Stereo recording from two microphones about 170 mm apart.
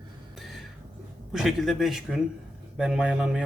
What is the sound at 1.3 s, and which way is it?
Speech, centre (ahead or behind).